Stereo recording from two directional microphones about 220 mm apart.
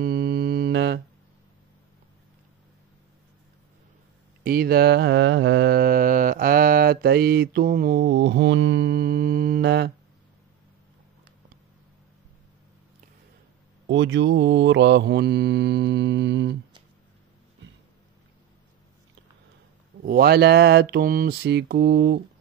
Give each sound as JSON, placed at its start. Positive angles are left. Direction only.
{"t": 0.0, "sound": "mantra", "side_deg": -45}
{"t": 4.4, "sound": "mantra", "side_deg": -45}
{"t": 13.8, "sound": "mantra", "side_deg": -55}
{"t": 20.0, "sound": "mantra", "side_deg": -45}